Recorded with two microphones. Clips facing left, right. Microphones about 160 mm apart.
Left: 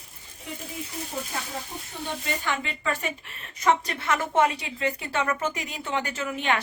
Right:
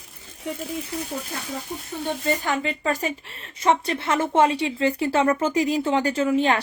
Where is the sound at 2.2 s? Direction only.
40° right (ahead or behind).